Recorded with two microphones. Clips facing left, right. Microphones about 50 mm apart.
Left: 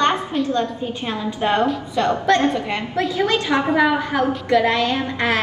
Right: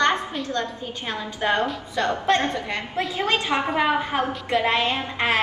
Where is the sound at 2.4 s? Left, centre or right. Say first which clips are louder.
Left 6 dB; left.